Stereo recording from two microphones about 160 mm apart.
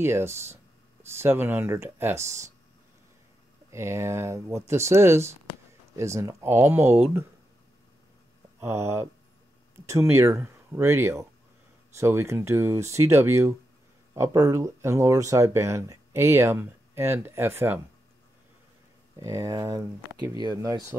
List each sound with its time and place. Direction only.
0.0 s speech: 15° right (ahead or behind)
3.7 s speech: 15° right (ahead or behind)
8.5 s speech: 15° right (ahead or behind)
19.1 s speech: 20° right (ahead or behind)